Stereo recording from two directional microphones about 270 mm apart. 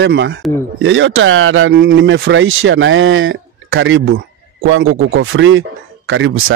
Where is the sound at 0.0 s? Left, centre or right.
Right.